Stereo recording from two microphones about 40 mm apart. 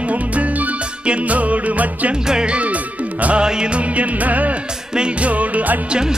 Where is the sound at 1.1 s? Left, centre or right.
Right.